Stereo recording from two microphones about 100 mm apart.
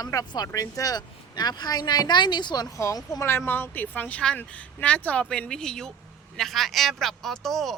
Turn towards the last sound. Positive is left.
turn(degrees=5)  # may be behind; listen again after turning